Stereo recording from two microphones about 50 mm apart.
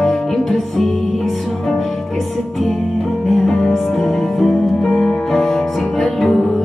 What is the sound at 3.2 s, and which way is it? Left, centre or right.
Music, centre.